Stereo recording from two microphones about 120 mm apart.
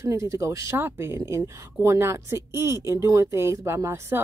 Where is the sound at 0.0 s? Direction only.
25° right (ahead or behind).